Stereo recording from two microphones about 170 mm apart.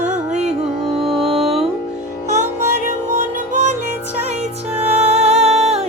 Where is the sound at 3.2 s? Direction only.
45° right (ahead or behind).